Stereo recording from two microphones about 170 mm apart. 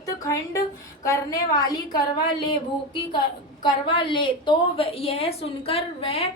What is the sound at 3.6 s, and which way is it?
A woman's voice, 30° left (ahead or behind).